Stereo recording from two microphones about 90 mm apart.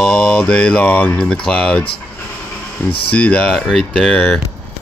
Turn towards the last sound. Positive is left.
turn(degrees=15)  # may be behind; listen again after turning